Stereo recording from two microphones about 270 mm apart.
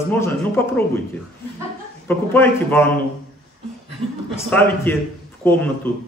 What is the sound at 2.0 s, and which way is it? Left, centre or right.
Speech, centre.